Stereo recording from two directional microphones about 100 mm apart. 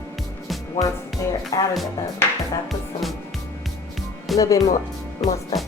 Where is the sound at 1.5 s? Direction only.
35° left (ahead or behind).